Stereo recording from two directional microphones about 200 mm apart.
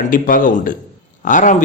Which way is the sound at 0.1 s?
45° left (ahead or behind).